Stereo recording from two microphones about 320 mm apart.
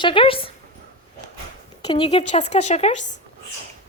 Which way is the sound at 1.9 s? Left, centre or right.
Centre.